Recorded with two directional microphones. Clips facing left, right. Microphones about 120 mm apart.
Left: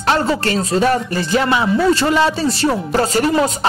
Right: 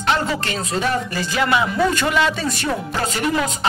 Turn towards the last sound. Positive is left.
turn(degrees=35)  # may be behind; listen again after turning